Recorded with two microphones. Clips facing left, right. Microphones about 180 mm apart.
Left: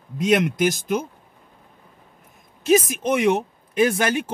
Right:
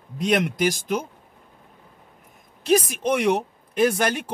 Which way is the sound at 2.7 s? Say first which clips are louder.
Left 2 dB; 5° left (ahead or behind).